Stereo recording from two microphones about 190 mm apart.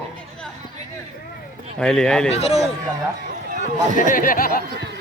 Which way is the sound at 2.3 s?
35° left (ahead or behind).